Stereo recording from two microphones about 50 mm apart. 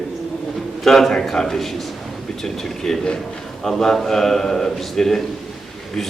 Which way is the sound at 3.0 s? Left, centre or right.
Centre.